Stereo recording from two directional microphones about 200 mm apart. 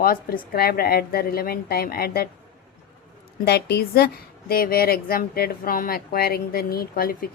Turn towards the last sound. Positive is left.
turn(degrees=50)  # may be behind; listen again after turning